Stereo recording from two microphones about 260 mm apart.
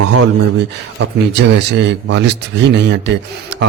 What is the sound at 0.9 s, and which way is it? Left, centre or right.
A man's voice, right.